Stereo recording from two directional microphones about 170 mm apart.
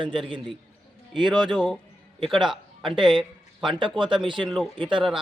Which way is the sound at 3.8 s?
30° right (ahead or behind).